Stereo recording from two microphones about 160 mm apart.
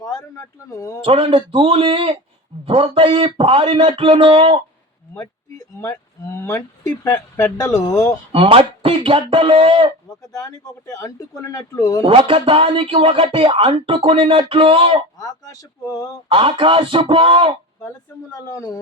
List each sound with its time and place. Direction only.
0.0 s speech: 25° left (ahead or behind)
1.0 s speech: 35° right (ahead or behind)
5.8 s speech: 15° left (ahead or behind)
8.3 s speech: 35° right (ahead or behind)
10.4 s speech: 25° left (ahead or behind)
12.0 s speech: 35° right (ahead or behind)
15.2 s speech: 25° left (ahead or behind)
16.3 s speech: 30° right (ahead or behind)
17.8 s speech: 20° left (ahead or behind)